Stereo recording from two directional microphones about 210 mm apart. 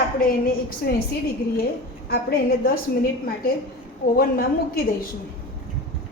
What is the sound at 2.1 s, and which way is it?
Speech, 45° left (ahead or behind).